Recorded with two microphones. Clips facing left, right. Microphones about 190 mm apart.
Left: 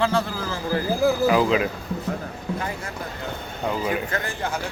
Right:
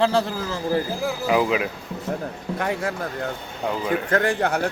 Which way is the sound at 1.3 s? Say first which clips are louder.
Left 1 dB; 10° right (ahead or behind).